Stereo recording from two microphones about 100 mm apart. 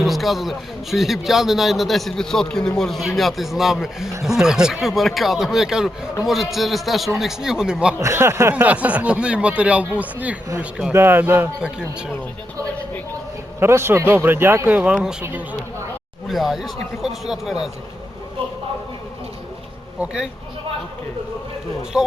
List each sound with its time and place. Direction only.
0.0 s a man's voice: centre (ahead or behind)
7.9 s a man's voice: 25° right (ahead or behind)
8.6 s speech: 15° right (ahead or behind)
13.6 s a man's voice: 25° right (ahead or behind)
16.3 s a man's voice: centre (ahead or behind)
21.9 s speech: 10° right (ahead or behind)